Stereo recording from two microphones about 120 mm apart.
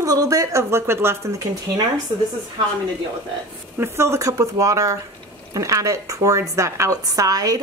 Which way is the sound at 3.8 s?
20° right (ahead or behind).